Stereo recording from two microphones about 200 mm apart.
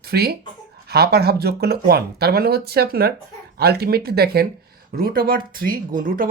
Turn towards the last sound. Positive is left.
turn(degrees=-45)  # may be behind; listen again after turning